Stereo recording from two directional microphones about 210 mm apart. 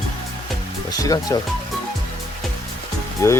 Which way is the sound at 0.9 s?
15° left (ahead or behind).